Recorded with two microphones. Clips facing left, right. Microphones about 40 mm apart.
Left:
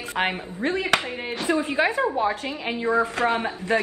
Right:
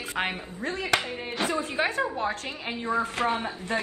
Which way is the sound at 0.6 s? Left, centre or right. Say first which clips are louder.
Left 4 dB; left.